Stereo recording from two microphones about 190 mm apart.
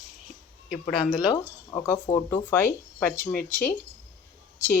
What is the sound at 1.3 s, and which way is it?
Speech, 15° left (ahead or behind).